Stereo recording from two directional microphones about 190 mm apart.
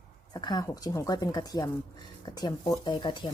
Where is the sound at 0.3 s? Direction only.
20° left (ahead or behind).